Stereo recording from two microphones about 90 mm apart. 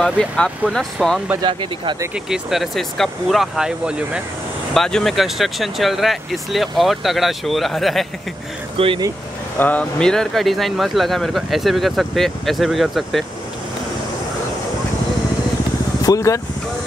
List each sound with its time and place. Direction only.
0.0 s speech: 5° left (ahead or behind)
1.4 s speech: 65° right (ahead or behind)
2.2 s speech: 5° right (ahead or behind)
4.7 s speech: 5° left (ahead or behind)
8.7 s speech: 85° right
9.6 s speech: 15° left (ahead or behind); by 13.2 s centre (ahead or behind)
16.0 s speech: 40° left (ahead or behind)